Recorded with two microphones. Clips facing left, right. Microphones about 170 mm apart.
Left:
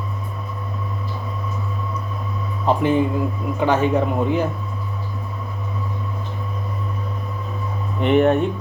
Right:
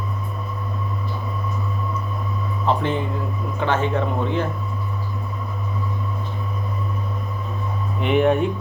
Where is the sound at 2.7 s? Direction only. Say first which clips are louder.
Left 5 dB; 15° left (ahead or behind).